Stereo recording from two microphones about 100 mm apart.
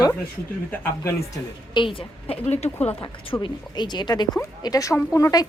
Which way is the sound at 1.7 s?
65° left (ahead or behind).